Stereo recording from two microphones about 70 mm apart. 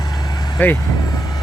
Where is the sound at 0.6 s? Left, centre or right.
Left.